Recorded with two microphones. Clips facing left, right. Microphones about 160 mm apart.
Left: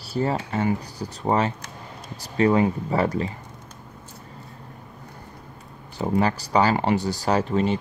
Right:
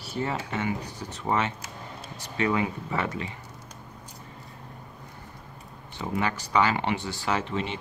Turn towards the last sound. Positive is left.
turn(degrees=40)  # may be behind; listen again after turning